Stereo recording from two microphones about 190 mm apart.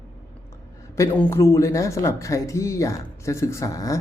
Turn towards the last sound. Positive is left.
turn(degrees=15)  # may be behind; listen again after turning